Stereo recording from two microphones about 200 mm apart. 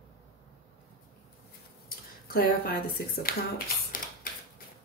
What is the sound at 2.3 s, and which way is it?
A woman's voice, 50° left (ahead or behind).